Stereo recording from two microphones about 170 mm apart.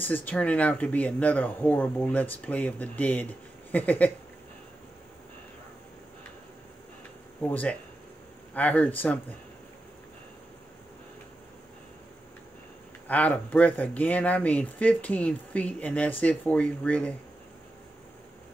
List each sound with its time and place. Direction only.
0.0 s speech: 10° left (ahead or behind)
7.4 s speech: 10° left (ahead or behind)
13.1 s speech: 10° left (ahead or behind)